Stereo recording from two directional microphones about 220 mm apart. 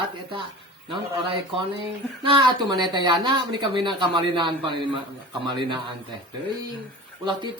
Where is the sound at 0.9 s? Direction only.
25° right (ahead or behind).